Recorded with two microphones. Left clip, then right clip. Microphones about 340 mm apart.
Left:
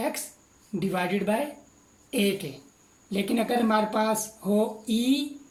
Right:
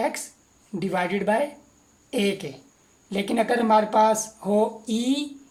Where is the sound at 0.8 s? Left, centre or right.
Centre.